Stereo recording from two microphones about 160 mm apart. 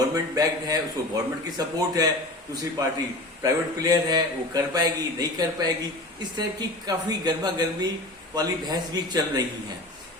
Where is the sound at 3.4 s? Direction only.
25° right (ahead or behind).